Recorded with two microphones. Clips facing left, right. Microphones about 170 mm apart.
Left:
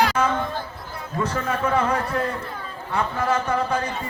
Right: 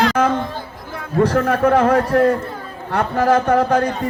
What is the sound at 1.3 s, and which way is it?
A man's voice, 60° right (ahead or behind).